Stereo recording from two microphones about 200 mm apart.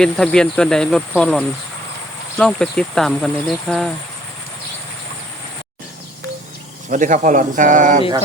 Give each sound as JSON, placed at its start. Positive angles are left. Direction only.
{"t": 0.0, "sound": "speech", "side_deg": 5}
{"t": 6.9, "sound": "a man's voice", "side_deg": -40}